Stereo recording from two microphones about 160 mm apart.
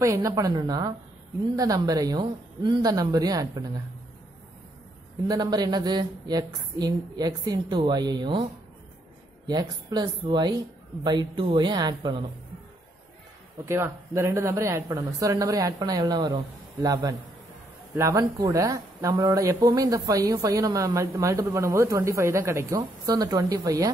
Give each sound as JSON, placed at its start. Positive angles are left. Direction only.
{"t": 0.0, "sound": "speech", "side_deg": -20}
{"t": 5.3, "sound": "speech", "side_deg": -25}
{"t": 9.5, "sound": "speech", "side_deg": -25}
{"t": 11.1, "sound": "speech", "side_deg": -30}
{"t": 13.7, "sound": "speech", "side_deg": -15}